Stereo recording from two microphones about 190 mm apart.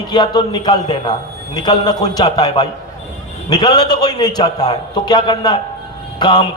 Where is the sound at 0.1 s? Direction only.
20° left (ahead or behind).